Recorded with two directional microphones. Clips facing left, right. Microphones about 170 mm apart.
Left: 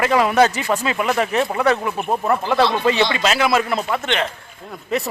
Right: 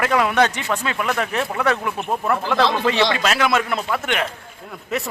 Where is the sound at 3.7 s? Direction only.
25° left (ahead or behind).